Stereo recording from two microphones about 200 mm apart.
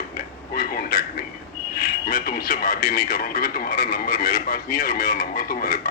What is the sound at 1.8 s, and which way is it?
Speech, 45° left (ahead or behind).